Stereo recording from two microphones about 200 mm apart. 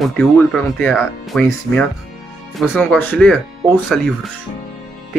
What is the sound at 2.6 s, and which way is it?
Speech, 5° left (ahead or behind).